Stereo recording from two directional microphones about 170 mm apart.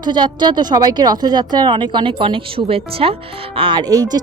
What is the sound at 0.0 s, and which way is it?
A woman's voice, 25° right (ahead or behind).